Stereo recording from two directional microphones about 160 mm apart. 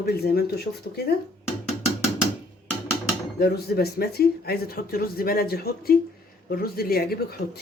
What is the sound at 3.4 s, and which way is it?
Speech, 75° left (ahead or behind).